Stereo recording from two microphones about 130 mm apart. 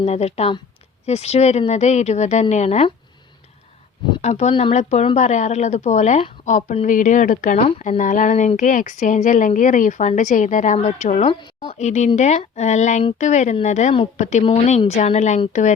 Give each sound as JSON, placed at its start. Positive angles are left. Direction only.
{"t": 0.0, "sound": "a woman's voice", "side_deg": 55}
{"t": 4.2, "sound": "a woman's voice", "side_deg": 60}
{"t": 6.8, "sound": "speech", "side_deg": 90}
{"t": 11.3, "sound": "speech", "side_deg": 35}
{"t": 11.6, "sound": "a woman's voice", "side_deg": 65}